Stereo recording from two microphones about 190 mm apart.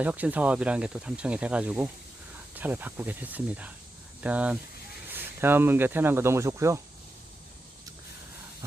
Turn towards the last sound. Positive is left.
turn(degrees=-15)  # may be behind; listen again after turning